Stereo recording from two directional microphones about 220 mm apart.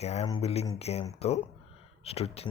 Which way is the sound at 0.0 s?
30° left (ahead or behind).